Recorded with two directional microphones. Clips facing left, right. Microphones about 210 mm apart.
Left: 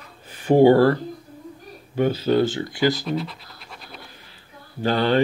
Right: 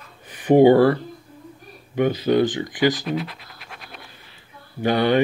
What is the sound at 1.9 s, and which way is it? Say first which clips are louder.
Speech: right 1 dB; 15° right (ahead or behind).